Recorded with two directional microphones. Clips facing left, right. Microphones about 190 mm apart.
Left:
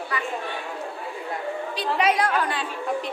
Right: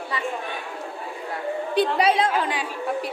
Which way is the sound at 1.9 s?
30° right (ahead or behind).